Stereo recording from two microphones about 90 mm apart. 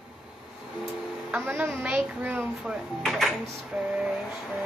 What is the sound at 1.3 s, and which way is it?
A woman's voice, 25° right (ahead or behind).